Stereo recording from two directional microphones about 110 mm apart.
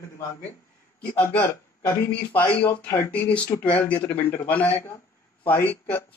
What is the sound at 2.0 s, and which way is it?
Speech, 15° left (ahead or behind).